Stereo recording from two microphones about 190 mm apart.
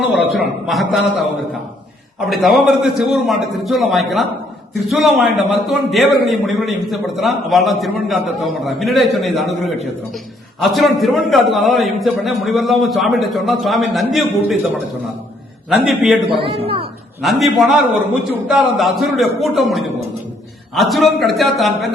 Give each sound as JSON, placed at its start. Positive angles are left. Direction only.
{"t": 0.1, "sound": "a man's voice", "side_deg": 0}
{"t": 2.3, "sound": "a man's voice", "side_deg": 0}
{"t": 15.7, "sound": "a man's voice", "side_deg": -5}
{"t": 16.3, "sound": "a man's voice", "side_deg": -30}
{"t": 17.2, "sound": "a man's voice", "side_deg": 0}